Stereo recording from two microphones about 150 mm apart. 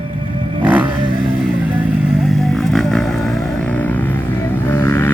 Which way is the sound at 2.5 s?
Centre (ahead or behind).